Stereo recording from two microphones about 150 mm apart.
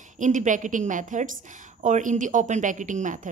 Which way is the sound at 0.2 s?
60° right (ahead or behind).